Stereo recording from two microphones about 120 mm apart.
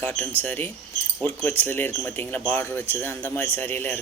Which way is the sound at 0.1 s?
15° left (ahead or behind).